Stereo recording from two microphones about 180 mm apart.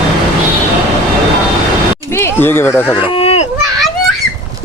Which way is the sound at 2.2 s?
10° left (ahead or behind).